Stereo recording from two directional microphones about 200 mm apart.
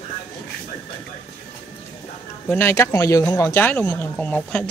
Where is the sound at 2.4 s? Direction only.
10° left (ahead or behind).